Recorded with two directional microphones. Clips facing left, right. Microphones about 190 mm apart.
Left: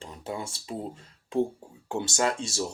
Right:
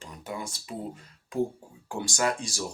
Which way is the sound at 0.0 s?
25° left (ahead or behind).